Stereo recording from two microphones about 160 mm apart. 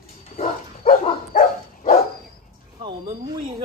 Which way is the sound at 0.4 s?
60° left (ahead or behind).